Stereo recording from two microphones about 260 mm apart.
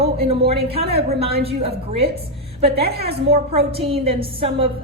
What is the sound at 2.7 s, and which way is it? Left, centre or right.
Speech, right.